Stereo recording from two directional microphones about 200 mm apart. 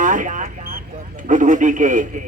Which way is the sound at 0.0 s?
40° right (ahead or behind).